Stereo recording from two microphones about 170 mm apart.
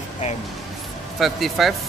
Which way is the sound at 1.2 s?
Centre (ahead or behind).